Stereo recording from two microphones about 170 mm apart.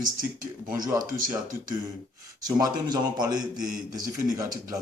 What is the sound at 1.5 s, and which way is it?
Speech, 75° left (ahead or behind).